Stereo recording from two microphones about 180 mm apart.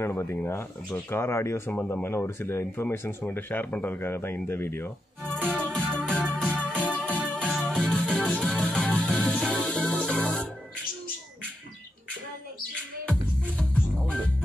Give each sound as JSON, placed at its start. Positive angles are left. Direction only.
{"t": 0.0, "sound": "speech", "side_deg": 10}
{"t": 5.5, "sound": "music", "side_deg": 5}
{"t": 13.0, "sound": "music", "side_deg": 5}